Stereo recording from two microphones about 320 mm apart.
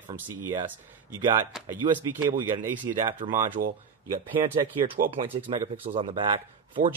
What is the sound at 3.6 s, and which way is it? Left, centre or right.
Speech, right.